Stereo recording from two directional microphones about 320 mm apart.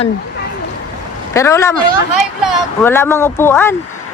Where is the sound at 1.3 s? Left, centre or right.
Centre.